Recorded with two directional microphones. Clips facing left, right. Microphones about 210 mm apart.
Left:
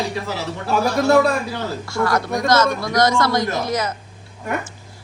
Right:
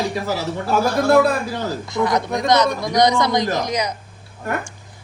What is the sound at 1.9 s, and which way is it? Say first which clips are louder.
A woman's voice: even; 20° right (ahead or behind).